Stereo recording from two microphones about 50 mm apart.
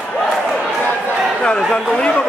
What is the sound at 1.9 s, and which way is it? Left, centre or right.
Speech, centre.